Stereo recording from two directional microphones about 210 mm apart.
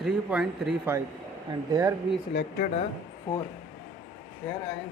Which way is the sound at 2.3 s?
55° left (ahead or behind).